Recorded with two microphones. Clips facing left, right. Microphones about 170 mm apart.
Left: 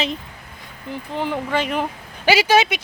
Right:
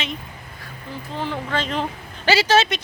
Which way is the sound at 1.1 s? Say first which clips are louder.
Left 3 dB; 15° left (ahead or behind).